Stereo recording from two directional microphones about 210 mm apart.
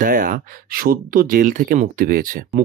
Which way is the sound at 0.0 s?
40° right (ahead or behind).